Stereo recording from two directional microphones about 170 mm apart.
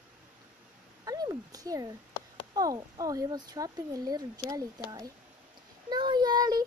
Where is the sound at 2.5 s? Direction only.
20° right (ahead or behind).